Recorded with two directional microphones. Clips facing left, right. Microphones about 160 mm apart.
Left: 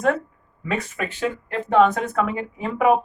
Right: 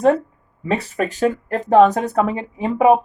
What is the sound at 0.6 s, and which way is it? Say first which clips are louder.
A woman's voice: right 5 dB; 35° right (ahead or behind).